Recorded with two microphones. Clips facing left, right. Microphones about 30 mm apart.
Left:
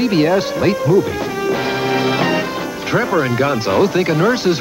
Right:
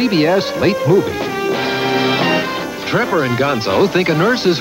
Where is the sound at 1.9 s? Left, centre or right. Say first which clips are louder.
Right 1 dB; right.